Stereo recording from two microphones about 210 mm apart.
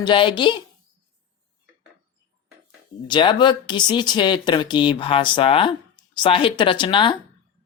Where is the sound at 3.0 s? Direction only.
20° left (ahead or behind).